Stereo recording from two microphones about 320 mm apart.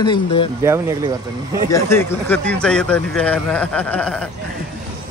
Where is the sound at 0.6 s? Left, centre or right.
Centre.